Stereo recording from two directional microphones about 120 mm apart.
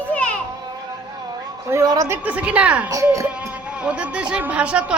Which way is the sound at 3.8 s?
10° right (ahead or behind).